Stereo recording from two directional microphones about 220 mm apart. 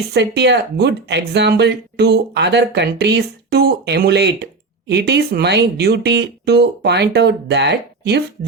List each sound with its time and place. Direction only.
0.1 s speech: 50° right (ahead or behind)